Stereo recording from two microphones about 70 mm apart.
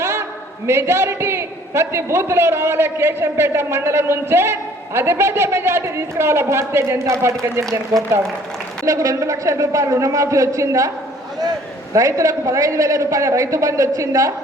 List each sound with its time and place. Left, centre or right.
0.0 s a sound: right
0.7 s a man's voice: right
11.9 s a man's voice: right